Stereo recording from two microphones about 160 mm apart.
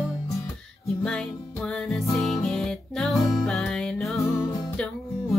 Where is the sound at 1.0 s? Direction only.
5° left (ahead or behind).